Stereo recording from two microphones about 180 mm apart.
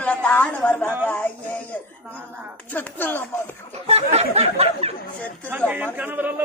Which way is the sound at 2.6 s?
10° left (ahead or behind).